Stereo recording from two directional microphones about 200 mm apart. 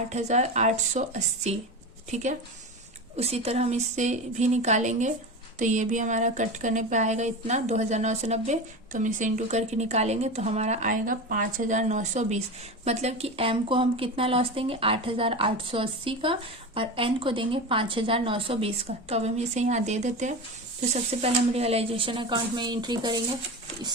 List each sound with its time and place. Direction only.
0.1 s a woman's voice: 35° right (ahead or behind)